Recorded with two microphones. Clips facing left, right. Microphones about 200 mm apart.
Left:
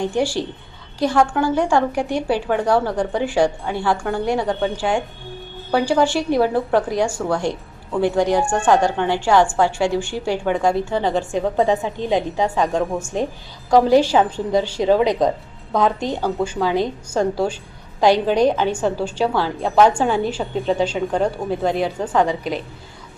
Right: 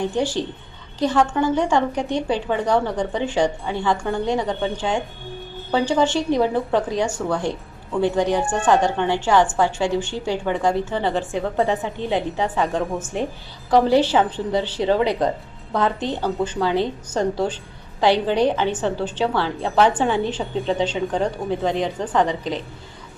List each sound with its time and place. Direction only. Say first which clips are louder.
0.0 s a woman's voice: left 2 dB; 10° left (ahead or behind)
12.8 s a woman's voice: left 2 dB; centre (ahead or behind)
13.7 s a woman's voice: left 2 dB; 15° left (ahead or behind)